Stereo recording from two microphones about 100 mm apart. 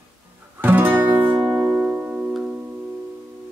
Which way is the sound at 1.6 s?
10° right (ahead or behind).